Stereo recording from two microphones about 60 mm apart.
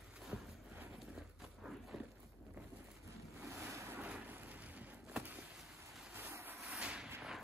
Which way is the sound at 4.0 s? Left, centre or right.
Right.